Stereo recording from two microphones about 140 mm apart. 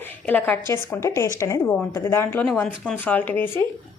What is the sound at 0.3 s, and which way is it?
A woman's voice, 10° left (ahead or behind).